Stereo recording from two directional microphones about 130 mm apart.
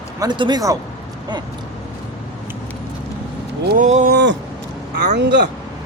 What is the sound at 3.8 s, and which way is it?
Speech, 75° right (ahead or behind).